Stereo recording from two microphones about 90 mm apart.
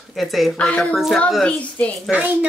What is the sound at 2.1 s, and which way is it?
Speech, 15° right (ahead or behind).